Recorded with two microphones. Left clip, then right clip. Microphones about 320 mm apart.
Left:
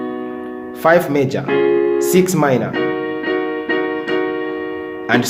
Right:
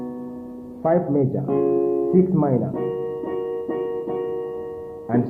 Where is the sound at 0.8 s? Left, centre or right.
Centre.